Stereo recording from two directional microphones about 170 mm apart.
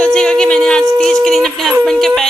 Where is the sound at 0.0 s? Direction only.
5° left (ahead or behind).